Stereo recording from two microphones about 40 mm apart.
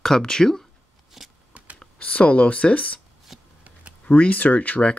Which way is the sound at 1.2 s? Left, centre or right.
Centre.